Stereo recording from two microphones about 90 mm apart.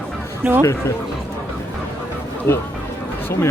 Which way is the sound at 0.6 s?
35° left (ahead or behind).